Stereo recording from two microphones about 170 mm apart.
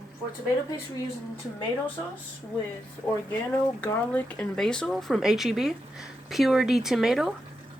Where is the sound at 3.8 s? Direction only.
10° left (ahead or behind).